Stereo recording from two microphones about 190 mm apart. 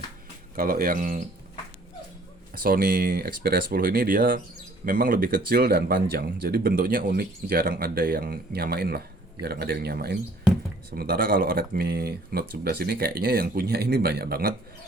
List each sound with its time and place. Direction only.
0.5 s speech: 50° right (ahead or behind)
2.5 s speech: 50° right (ahead or behind)